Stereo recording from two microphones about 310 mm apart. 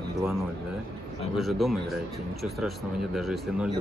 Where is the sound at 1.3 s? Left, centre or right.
Centre.